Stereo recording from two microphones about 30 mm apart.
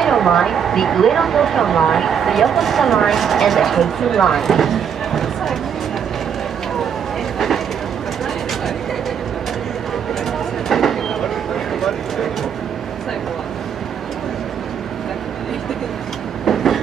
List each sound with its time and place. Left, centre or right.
0.0 s speech: centre
7.3 s vehicle: centre
10.7 s train: centre
16.4 s train: centre